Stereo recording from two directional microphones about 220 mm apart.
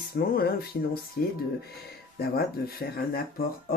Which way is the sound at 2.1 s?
45° left (ahead or behind).